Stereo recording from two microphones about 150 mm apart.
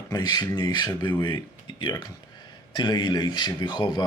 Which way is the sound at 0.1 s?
25° left (ahead or behind).